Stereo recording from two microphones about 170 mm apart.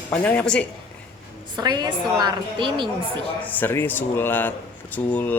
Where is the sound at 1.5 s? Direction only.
25° right (ahead or behind).